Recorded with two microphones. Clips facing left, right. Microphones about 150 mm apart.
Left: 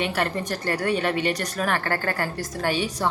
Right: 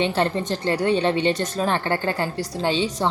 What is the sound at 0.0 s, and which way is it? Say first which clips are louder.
Speech: right 4 dB; 25° right (ahead or behind).